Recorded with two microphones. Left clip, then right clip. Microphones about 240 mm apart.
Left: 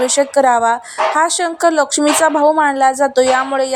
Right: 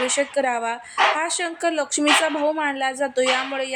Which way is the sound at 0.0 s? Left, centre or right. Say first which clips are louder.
Left 9 dB; left.